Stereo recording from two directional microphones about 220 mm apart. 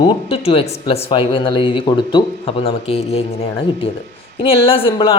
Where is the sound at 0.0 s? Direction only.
25° left (ahead or behind).